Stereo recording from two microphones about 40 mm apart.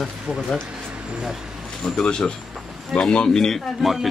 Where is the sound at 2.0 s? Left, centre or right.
Left.